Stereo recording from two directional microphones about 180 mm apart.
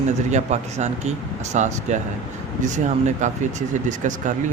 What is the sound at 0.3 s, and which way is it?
Speech, 40° right (ahead or behind).